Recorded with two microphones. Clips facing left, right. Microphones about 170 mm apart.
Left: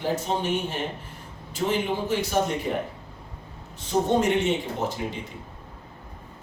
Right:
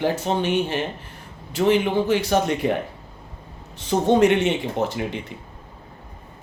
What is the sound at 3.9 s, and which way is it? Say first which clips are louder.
Speech: right 5 dB; 75° right (ahead or behind).